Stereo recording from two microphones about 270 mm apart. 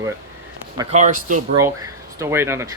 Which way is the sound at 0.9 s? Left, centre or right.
Right.